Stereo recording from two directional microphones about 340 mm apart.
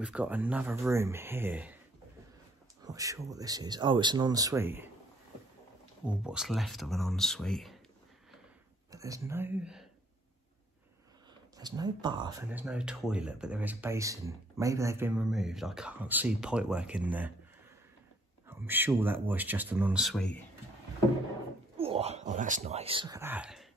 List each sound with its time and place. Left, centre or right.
0.0 s speech: centre
2.9 s speech: centre
6.0 s speech: centre
8.9 s speech: centre
11.5 s speech: centre
18.5 s speech: centre
21.7 s speech: centre